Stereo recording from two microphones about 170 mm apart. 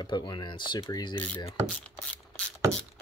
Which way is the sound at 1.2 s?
10° left (ahead or behind).